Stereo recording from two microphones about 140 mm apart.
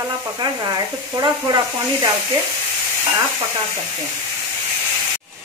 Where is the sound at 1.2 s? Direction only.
25° right (ahead or behind).